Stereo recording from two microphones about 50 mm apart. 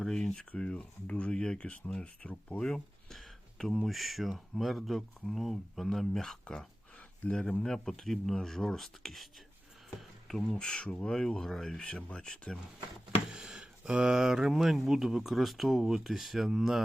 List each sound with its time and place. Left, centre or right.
0.0 s speech: centre
2.6 s speech: centre
3.9 s speech: centre
6.9 s a sound: centre
7.6 s speech: centre
11.8 s speech: centre
13.3 s speech: centre